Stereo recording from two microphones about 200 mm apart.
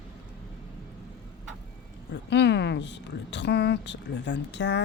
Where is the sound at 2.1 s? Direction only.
60° left (ahead or behind).